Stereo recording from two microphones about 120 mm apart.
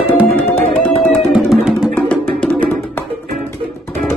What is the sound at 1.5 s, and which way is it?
Music, 5° right (ahead or behind).